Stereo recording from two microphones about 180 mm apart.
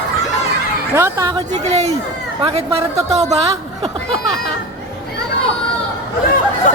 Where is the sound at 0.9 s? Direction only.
15° right (ahead or behind).